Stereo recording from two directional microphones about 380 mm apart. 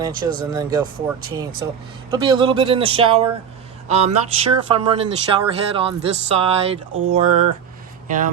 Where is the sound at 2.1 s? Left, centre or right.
Centre.